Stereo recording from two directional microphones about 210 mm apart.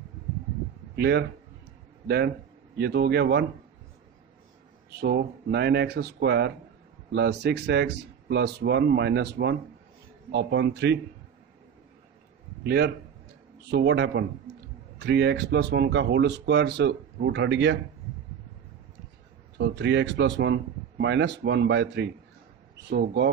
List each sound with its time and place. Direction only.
0.9 s a man's voice: 50° right (ahead or behind)
5.0 s speech: 50° right (ahead or behind)
12.6 s speech: 50° right (ahead or behind)
19.6 s speech: 55° right (ahead or behind)